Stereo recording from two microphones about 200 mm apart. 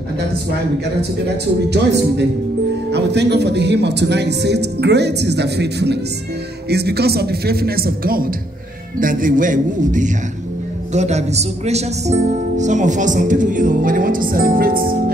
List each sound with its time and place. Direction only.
2.9 s a man's voice: 55° right (ahead or behind)